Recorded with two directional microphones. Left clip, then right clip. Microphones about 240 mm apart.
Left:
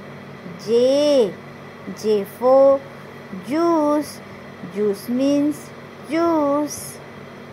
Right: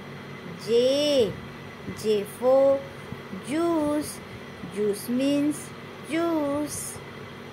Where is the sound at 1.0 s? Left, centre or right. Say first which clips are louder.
Left 6 dB; centre.